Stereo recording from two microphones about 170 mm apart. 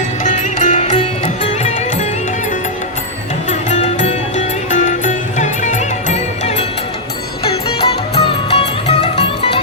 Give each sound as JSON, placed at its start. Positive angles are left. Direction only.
{"t": 0.2, "sound": "music", "side_deg": 45}
{"t": 3.5, "sound": "music", "side_deg": 45}
{"t": 8.1, "sound": "music", "side_deg": 35}